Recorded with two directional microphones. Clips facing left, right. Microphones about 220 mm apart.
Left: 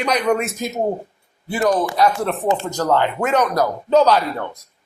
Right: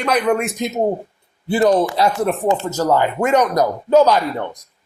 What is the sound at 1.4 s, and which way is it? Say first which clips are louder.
Speech: right 4 dB; 25° right (ahead or behind).